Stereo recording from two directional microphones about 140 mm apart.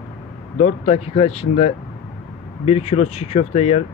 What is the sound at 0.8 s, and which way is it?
Speech, 45° left (ahead or behind).